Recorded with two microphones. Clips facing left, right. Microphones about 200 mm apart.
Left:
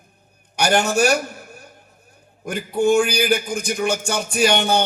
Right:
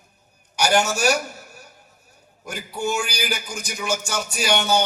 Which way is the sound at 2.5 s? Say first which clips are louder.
Left 9 dB; 55° left (ahead or behind).